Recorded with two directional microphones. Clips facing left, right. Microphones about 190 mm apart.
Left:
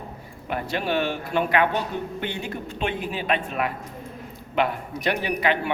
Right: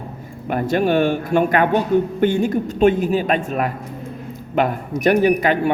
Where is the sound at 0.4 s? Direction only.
50° right (ahead or behind).